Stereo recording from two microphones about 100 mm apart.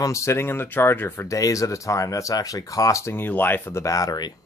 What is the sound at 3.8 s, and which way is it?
Speech, 35° left (ahead or behind).